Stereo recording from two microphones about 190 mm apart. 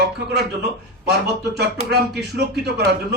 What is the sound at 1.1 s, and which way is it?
Speech, 60° right (ahead or behind).